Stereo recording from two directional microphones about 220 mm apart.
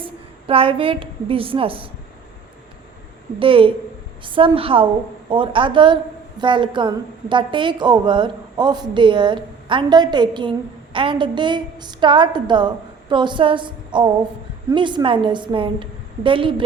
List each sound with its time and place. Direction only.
0.0 s a woman's voice: 25° right (ahead or behind)
3.3 s a woman's voice: 25° right (ahead or behind)